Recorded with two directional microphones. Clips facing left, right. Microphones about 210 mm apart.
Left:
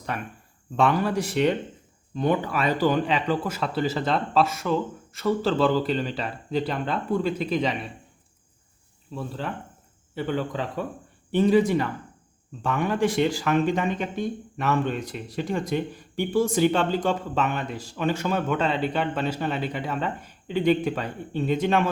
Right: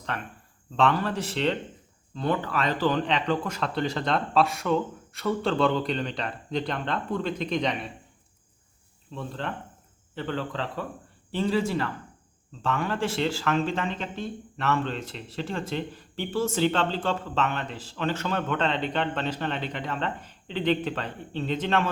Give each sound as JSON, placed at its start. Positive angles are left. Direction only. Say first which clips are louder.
{"t": 0.1, "sound": "speech", "louder": "left 2 dB", "side_deg": 10}
{"t": 9.1, "sound": "speech", "louder": "left 2 dB", "side_deg": 5}